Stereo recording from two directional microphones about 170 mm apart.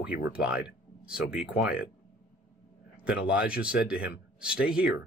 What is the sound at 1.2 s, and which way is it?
Speech, 65° left (ahead or behind).